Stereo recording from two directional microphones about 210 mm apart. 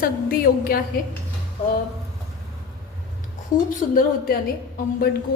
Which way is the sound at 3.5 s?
40° left (ahead or behind).